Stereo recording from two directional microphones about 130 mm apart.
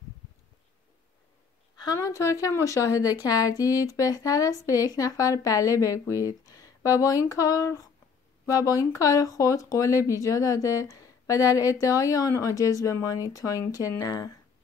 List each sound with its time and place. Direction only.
2.0 s speech: 25° left (ahead or behind)